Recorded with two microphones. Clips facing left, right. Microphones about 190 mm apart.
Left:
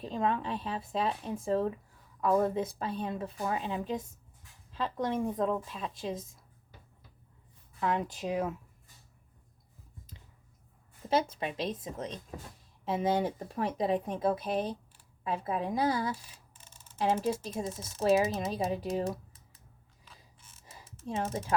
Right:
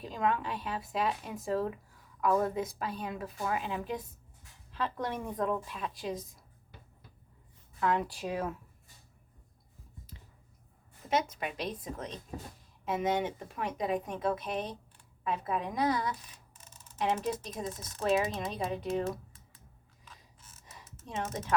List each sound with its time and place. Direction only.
0.0 s speech: 30° left (ahead or behind)
7.8 s speech: 20° left (ahead or behind)
11.1 s speech: 30° left (ahead or behind)
20.6 s typing: 30° left (ahead or behind)